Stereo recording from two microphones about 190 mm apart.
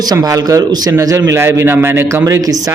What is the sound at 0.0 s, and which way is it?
A man's voice, 20° right (ahead or behind).